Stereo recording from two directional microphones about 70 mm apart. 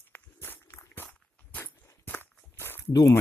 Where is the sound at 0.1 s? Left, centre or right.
Left.